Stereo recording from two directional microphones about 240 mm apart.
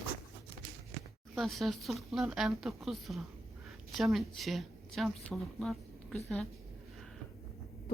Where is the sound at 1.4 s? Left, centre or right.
Centre.